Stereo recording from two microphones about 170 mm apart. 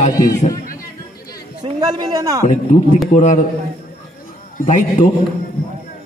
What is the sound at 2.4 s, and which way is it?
Speech, 45° left (ahead or behind).